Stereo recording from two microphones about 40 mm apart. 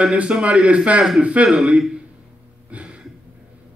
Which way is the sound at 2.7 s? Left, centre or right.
Right.